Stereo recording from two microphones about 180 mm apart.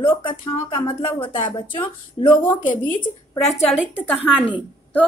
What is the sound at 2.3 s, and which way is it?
Speech, 10° left (ahead or behind).